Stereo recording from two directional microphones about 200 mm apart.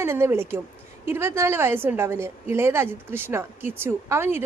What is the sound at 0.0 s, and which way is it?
A woman's voice, 10° right (ahead or behind).